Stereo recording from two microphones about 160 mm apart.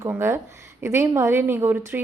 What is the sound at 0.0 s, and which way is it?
A woman's voice, 15° right (ahead or behind).